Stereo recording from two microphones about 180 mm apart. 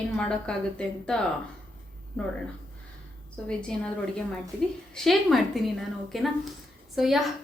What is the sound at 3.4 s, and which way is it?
Speech, 5° left (ahead or behind).